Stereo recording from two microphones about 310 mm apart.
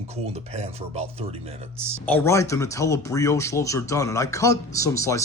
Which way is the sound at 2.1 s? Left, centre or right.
Centre.